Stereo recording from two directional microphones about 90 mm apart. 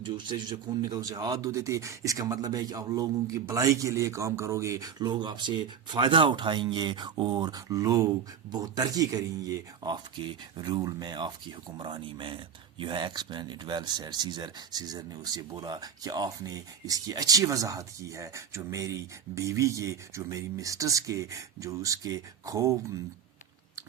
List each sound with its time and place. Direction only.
0.0 s speech: 60° right (ahead or behind)
0.8 s speech: 45° right (ahead or behind)
4.9 s speech: 50° right (ahead or behind)
10.6 s speech: 45° right (ahead or behind)